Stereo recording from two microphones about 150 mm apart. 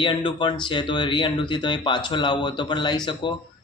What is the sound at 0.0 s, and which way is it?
Speech, 30° left (ahead or behind).